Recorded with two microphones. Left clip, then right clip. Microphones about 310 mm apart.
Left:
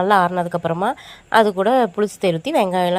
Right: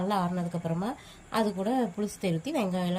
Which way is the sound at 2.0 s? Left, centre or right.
Centre.